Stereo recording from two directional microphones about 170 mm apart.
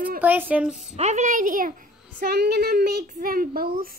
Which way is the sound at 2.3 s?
75° right (ahead or behind).